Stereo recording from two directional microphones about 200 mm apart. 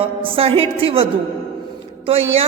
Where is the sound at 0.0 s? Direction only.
25° right (ahead or behind).